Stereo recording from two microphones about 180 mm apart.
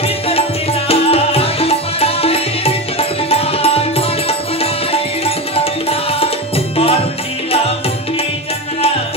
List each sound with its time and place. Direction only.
0.3 s music: 35° left (ahead or behind)